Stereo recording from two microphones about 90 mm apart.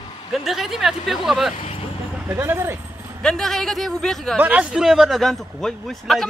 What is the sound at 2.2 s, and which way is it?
Speech, 25° right (ahead or behind).